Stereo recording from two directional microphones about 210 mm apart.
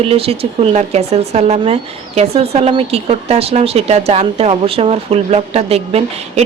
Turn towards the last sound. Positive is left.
turn(degrees=-30)  # may be behind; listen again after turning